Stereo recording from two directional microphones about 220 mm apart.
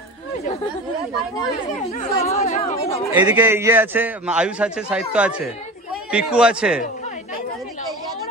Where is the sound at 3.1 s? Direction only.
5° right (ahead or behind).